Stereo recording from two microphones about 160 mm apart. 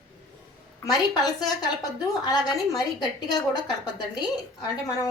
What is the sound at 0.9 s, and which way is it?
A woman's voice, 25° left (ahead or behind).